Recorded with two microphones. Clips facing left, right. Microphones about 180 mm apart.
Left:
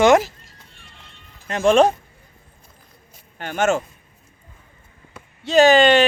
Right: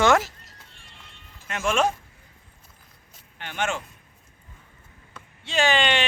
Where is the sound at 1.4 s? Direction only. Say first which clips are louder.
Left 9 dB; 35° left (ahead or behind).